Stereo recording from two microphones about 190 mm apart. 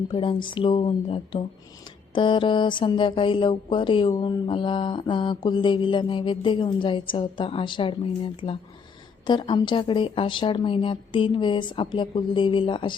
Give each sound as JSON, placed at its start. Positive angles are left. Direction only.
{"t": 0.1, "sound": "mantra", "side_deg": 25}